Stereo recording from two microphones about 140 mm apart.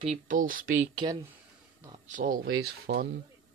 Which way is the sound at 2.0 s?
70° right (ahead or behind).